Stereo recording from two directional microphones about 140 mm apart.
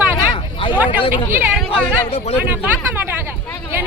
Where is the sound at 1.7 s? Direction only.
50° left (ahead or behind).